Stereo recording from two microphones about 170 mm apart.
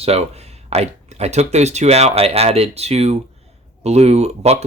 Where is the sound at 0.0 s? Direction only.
35° right (ahead or behind).